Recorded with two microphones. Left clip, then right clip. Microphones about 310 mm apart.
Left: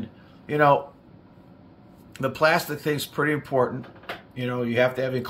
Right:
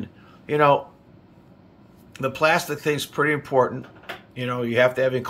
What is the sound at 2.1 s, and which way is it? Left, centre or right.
Speech, centre.